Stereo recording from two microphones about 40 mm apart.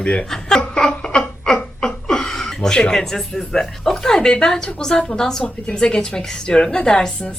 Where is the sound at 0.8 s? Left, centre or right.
Centre.